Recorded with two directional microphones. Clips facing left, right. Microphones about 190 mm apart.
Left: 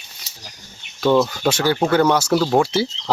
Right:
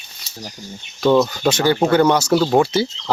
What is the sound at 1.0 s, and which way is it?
Speech, 5° left (ahead or behind).